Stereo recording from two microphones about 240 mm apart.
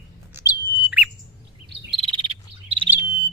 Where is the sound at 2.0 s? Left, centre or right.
Right.